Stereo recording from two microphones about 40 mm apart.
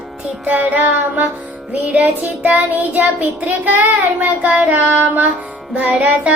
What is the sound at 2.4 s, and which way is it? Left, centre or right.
Child singing, right.